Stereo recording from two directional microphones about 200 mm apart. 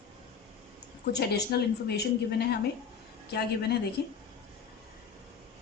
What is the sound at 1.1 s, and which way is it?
A woman's voice, 55° left (ahead or behind).